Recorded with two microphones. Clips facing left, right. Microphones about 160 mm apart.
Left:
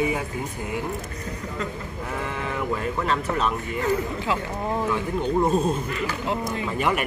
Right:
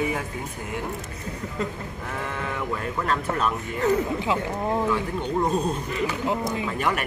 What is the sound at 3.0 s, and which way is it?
Speech, centre (ahead or behind).